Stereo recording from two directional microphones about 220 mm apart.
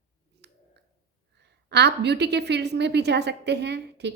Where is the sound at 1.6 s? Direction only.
50° right (ahead or behind).